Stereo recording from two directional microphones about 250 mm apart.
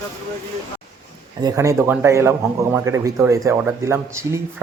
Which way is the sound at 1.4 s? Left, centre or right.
Centre.